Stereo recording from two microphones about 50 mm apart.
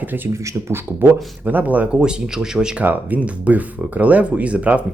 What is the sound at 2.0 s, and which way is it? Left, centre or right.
Speech, centre.